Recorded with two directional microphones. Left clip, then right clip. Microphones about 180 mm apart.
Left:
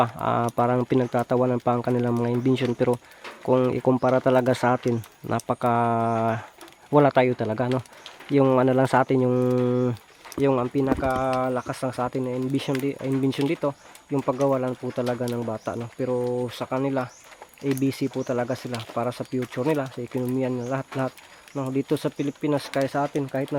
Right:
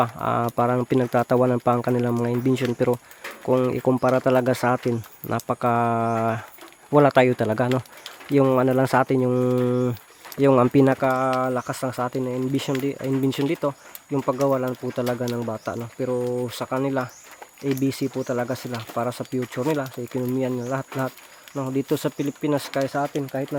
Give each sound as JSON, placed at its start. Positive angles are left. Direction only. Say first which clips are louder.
{"t": 0.0, "sound": "speech", "louder": "even", "side_deg": -5}
{"t": 8.3, "sound": "speech", "louder": "right 1 dB", "side_deg": -5}
{"t": 10.6, "sound": "speech", "louder": "right 7 dB", "side_deg": -60}
{"t": 11.3, "sound": "speech", "louder": "right 1 dB", "side_deg": -5}
{"t": 22.7, "sound": "speech", "louder": "even", "side_deg": 10}